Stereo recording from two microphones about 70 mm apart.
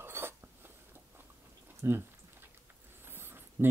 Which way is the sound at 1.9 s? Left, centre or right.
Right.